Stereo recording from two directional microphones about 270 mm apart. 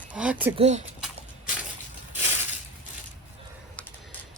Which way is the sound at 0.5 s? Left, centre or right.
Right.